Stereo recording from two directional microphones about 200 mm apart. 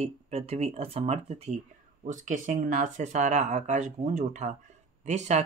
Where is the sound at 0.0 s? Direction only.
30° right (ahead or behind).